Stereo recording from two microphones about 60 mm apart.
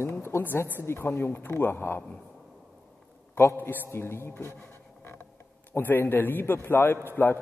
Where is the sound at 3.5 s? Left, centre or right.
Left.